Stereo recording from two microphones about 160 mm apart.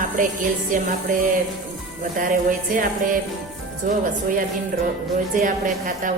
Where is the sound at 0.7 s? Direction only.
60° right (ahead or behind).